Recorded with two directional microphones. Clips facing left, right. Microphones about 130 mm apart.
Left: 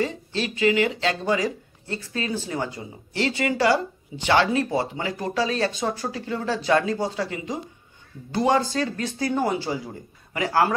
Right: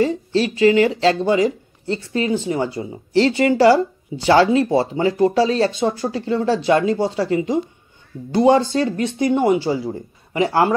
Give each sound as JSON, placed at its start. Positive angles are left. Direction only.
{"t": 0.0, "sound": "speech", "side_deg": -30}